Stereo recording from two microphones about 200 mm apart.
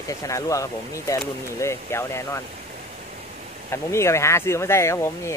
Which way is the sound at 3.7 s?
15° left (ahead or behind).